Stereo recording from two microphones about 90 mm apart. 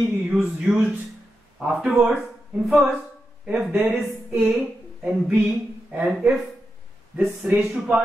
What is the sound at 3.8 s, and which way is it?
Speech, 15° right (ahead or behind).